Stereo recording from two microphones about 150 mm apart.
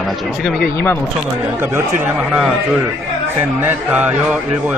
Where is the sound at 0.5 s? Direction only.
90° left.